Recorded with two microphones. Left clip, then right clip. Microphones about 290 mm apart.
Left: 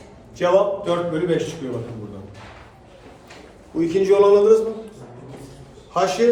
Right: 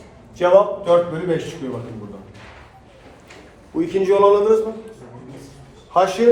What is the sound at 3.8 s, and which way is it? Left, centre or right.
Speech, right.